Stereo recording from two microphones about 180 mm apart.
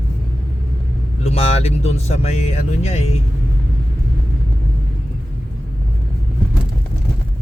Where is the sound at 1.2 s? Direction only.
35° left (ahead or behind).